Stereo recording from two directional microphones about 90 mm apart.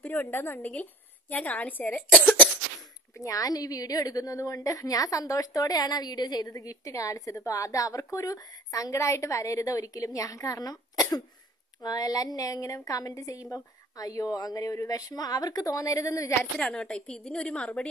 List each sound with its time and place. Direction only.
0.0 s a woman's voice: 20° left (ahead or behind)
3.2 s a woman's voice: 40° left (ahead or behind)
16.5 s a woman's voice: 10° left (ahead or behind)